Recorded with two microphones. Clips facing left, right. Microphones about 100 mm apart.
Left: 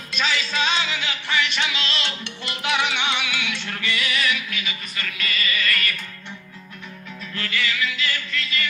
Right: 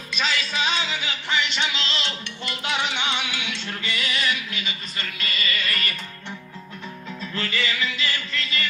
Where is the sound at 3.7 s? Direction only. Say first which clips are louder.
Left 2 dB; 20° right (ahead or behind).